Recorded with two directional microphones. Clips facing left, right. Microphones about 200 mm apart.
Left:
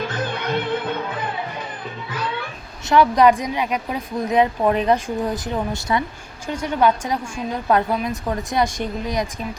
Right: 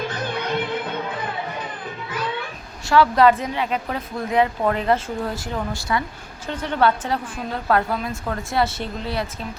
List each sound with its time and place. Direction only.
2.9 s speech: 15° left (ahead or behind)